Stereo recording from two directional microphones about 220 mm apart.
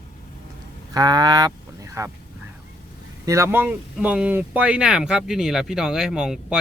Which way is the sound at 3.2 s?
15° right (ahead or behind).